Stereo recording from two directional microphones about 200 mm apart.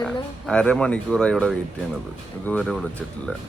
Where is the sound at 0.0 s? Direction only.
5° left (ahead or behind).